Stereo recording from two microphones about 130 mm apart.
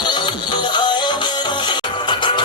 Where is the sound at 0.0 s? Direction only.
35° left (ahead or behind).